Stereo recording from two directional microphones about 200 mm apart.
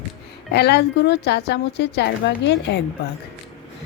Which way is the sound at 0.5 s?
55° left (ahead or behind).